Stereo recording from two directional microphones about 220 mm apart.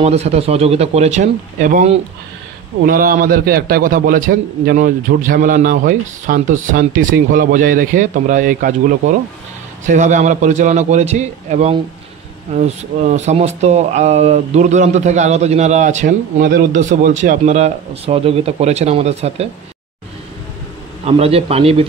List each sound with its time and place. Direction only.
0.0 s speech: 30° right (ahead or behind)
21.0 s speech: 25° right (ahead or behind)